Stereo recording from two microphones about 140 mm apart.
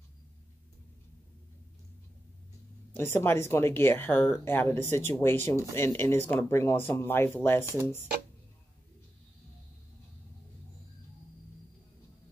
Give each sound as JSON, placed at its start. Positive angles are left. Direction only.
{"t": 2.9, "sound": "speech", "side_deg": 15}